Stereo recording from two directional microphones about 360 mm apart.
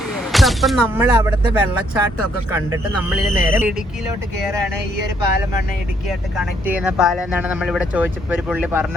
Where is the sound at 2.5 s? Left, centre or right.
Centre.